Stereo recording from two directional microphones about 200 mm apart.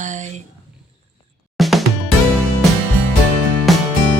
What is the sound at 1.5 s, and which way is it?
Music, centre (ahead or behind).